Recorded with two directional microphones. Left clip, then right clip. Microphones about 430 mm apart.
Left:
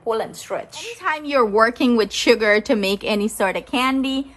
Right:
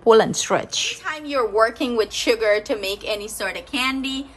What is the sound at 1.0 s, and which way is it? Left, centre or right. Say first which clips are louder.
A woman's voice: left 4 dB; centre.